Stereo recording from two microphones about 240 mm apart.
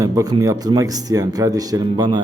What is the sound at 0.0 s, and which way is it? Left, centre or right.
A man's voice, centre.